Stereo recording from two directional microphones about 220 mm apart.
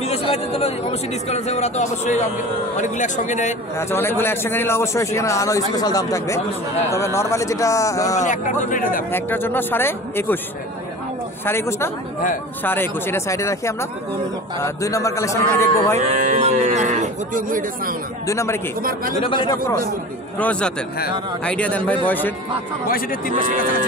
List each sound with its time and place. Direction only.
0.0 s chatter: 30° left (ahead or behind)
1.3 s speech: 30° left (ahead or behind)
3.7 s a man's voice: 10° left (ahead or behind)
8.3 s speech: 35° left (ahead or behind)
9.1 s a man's voice: 10° left (ahead or behind)
11.4 s a man's voice: 10° left (ahead or behind)
16.0 s speech: 35° right (ahead or behind)
18.2 s a man's voice: 15° left (ahead or behind)
18.8 s speech: 40° right (ahead or behind)
19.2 s speech: 20° left (ahead or behind)
20.3 s a man's voice: 5° left (ahead or behind)
22.8 s speech: 40° left (ahead or behind)